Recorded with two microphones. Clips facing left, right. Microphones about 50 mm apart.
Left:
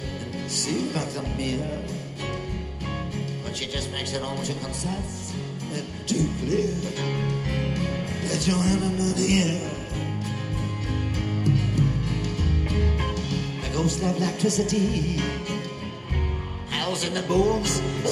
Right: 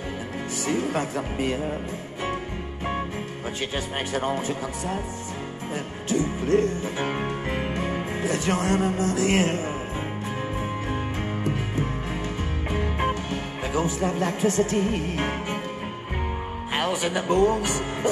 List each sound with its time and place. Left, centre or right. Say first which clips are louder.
0.7 s speech: right 2 dB; right
3.7 s speech: right 3 dB; right
6.0 s music: right 2 dB; right
10.9 s music: right 1 dB; right
16.7 s speech: right 2 dB; right